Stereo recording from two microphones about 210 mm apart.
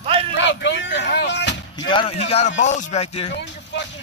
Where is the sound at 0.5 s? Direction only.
55° left (ahead or behind).